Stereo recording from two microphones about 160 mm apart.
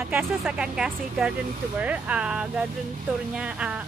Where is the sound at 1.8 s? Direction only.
10° right (ahead or behind).